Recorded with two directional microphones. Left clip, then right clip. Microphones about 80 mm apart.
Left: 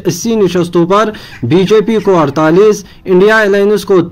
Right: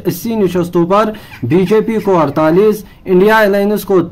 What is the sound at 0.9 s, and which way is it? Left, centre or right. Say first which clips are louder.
Speech: left 2 dB; left.